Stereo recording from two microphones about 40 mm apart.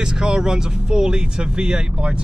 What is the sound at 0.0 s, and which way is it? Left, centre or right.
Speech, centre.